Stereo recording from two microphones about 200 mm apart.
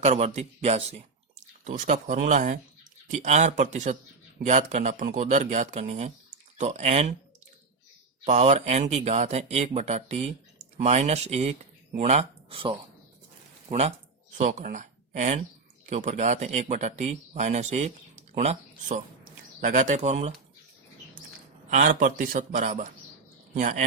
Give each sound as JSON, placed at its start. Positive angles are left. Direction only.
{"t": 0.0, "sound": "speech", "side_deg": -35}
{"t": 8.2, "sound": "speech", "side_deg": -35}
{"t": 21.7, "sound": "speech", "side_deg": -40}